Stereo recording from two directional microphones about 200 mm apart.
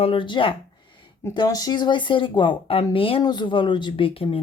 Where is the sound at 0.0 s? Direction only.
25° left (ahead or behind).